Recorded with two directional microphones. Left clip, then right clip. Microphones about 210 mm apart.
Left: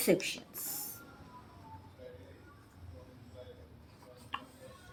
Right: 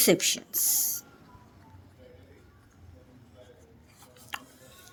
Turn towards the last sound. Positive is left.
turn(degrees=-55)  # may be behind; listen again after turning